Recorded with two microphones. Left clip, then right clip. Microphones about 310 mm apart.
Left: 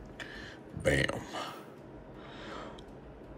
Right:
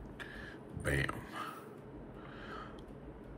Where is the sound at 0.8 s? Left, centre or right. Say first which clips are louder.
Left 7 dB; centre.